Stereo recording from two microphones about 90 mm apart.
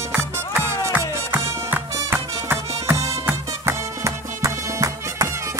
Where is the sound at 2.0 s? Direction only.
30° right (ahead or behind).